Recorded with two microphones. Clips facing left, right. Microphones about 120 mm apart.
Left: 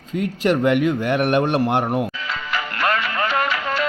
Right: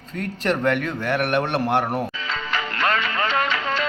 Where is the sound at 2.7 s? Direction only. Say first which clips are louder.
Left 2 dB; 45° left (ahead or behind).